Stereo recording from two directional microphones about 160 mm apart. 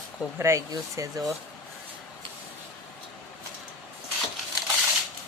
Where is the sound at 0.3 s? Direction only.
15° right (ahead or behind).